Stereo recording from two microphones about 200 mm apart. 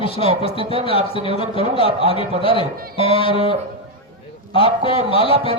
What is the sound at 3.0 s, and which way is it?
Speech, 25° left (ahead or behind).